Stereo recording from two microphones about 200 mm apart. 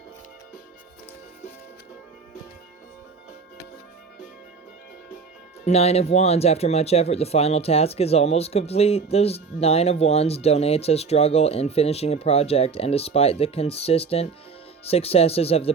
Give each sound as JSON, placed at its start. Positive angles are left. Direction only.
{"t": 5.6, "sound": "speech", "side_deg": 30}